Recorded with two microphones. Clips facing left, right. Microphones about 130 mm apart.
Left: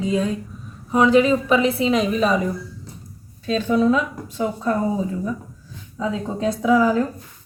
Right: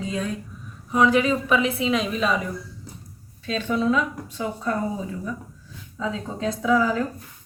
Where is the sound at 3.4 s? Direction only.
40° left (ahead or behind).